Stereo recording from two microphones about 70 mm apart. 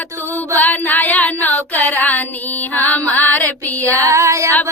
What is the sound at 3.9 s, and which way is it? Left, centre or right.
Female singing, right.